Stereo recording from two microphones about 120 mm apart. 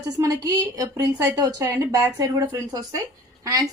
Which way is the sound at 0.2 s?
25° right (ahead or behind).